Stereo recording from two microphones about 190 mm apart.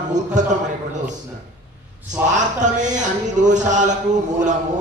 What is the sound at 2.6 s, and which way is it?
Speech, 40° right (ahead or behind).